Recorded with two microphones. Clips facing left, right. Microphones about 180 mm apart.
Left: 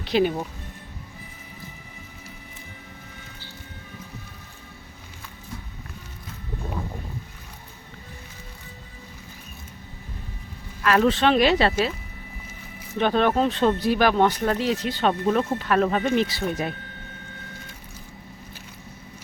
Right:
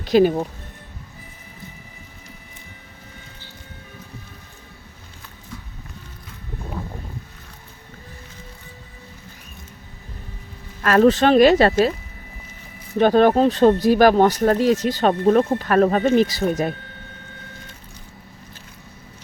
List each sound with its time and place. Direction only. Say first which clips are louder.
0.0 s speech: right 6 dB; 40° right (ahead or behind)
10.8 s speech: right 5 dB; 45° right (ahead or behind)
13.0 s speech: right 6 dB; 40° right (ahead or behind)